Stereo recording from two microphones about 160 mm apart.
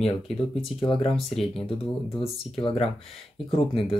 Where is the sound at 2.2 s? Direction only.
35° left (ahead or behind).